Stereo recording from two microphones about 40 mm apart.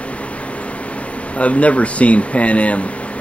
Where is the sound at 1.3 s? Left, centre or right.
Left.